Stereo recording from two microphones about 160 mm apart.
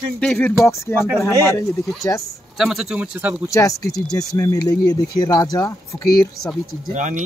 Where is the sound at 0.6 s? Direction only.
15° left (ahead or behind).